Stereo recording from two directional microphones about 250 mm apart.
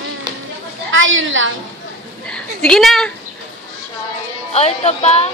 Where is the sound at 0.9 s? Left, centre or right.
Right.